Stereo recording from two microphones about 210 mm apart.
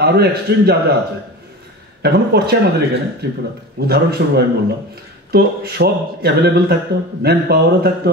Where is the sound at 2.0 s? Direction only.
50° right (ahead or behind).